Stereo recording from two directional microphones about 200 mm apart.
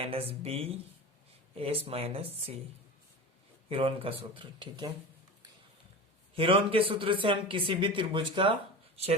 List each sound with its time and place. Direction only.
0.0 s a man's voice: 30° right (ahead or behind)
3.7 s a man's voice: 25° right (ahead or behind)
6.3 s a man's voice: 25° right (ahead or behind)